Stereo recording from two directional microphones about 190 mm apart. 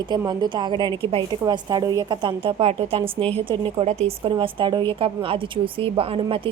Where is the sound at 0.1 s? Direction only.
25° right (ahead or behind).